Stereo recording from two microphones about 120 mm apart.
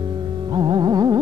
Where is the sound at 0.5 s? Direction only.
35° right (ahead or behind).